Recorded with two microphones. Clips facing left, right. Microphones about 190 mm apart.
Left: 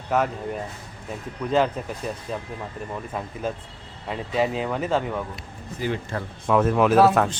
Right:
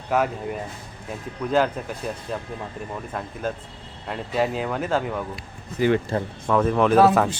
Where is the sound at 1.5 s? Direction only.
Centre (ahead or behind).